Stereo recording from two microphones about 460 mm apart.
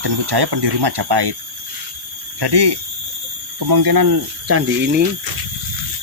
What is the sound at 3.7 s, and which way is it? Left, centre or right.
Speech, right.